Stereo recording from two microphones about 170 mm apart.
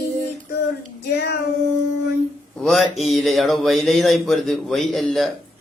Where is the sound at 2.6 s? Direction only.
Centre (ahead or behind).